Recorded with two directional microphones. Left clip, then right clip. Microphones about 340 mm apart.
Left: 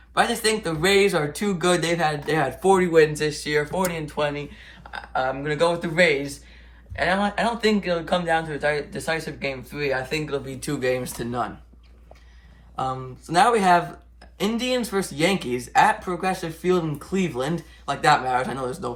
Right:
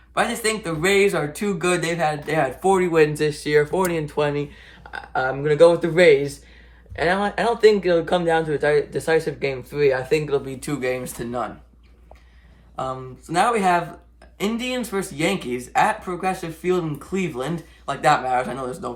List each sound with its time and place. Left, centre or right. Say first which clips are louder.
0.1 s speech: left 1 dB; centre
2.9 s speech: even; right; by 11.5 s centre
12.7 s speech: left 1 dB; centre